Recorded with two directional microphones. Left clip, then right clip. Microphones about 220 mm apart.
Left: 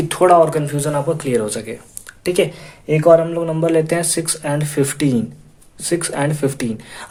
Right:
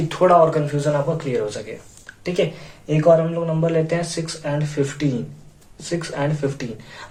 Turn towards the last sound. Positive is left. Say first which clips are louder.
# left 6 dB
turn(degrees=45)  # may be behind; listen again after turning